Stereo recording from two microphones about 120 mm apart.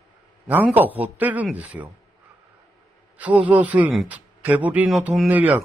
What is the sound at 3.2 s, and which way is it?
A man's voice, 10° right (ahead or behind).